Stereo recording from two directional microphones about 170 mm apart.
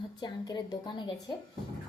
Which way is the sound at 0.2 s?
25° left (ahead or behind).